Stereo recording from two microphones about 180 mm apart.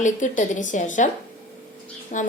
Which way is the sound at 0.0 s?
45° left (ahead or behind).